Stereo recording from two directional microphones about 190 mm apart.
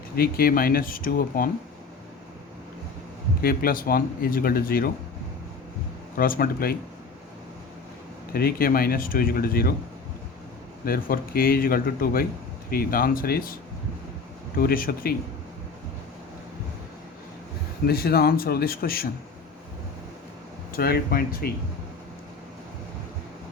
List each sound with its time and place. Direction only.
0.2 s speech: 50° left (ahead or behind)
3.4 s speech: 50° left (ahead or behind)
6.1 s speech: 50° left (ahead or behind)
8.3 s speech: 55° left (ahead or behind)
10.8 s speech: 50° left (ahead or behind)
14.6 s speech: 50° left (ahead or behind)
17.8 s speech: 55° left (ahead or behind)
20.7 s speech: 50° left (ahead or behind)